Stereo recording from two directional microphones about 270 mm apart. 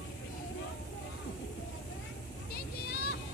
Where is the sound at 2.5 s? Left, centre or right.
Left.